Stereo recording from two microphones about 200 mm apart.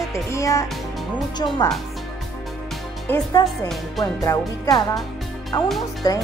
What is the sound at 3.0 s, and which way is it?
Speech, 15° left (ahead or behind).